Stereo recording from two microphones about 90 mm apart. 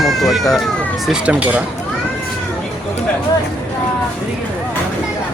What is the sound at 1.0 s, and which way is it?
Speech, 10° right (ahead or behind).